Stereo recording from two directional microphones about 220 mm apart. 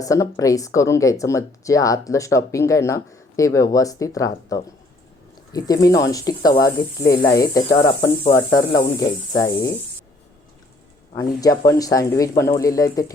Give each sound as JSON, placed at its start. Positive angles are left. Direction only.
{"t": 0.0, "sound": "speech", "side_deg": 15}
{"t": 11.1, "sound": "speech", "side_deg": 15}